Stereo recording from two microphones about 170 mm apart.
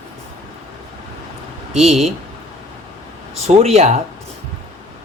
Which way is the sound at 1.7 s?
Centre (ahead or behind).